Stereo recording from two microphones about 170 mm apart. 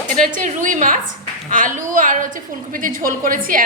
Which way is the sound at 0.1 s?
50° right (ahead or behind).